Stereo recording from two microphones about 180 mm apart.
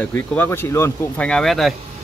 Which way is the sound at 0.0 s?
10° left (ahead or behind).